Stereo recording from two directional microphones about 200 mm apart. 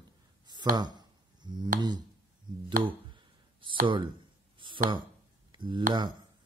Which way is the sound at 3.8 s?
25° right (ahead or behind).